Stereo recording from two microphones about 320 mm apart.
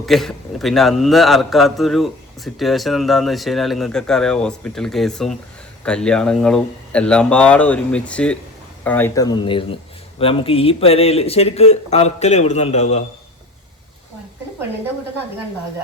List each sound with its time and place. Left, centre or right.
0.0 s a man's voice: centre; by 13.1 s left